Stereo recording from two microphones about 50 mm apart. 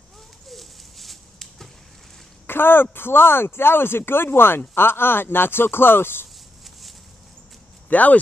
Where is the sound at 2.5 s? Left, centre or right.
Left.